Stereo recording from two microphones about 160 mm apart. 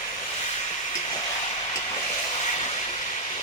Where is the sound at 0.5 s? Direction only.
35° left (ahead or behind).